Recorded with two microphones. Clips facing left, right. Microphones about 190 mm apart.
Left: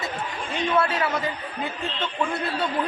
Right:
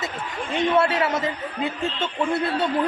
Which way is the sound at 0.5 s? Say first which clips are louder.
Right 3 dB; 25° right (ahead or behind).